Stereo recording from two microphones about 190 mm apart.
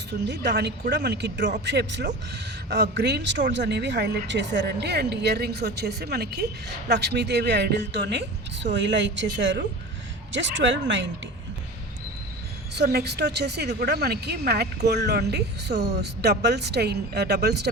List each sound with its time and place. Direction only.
0.1 s a woman's voice: 60° right (ahead or behind)
12.7 s a woman's voice: 55° right (ahead or behind)